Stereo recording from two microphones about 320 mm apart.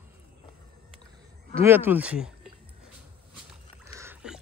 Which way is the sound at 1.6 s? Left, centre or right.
Centre.